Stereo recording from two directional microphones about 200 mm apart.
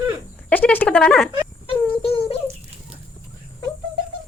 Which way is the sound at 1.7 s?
30° left (ahead or behind).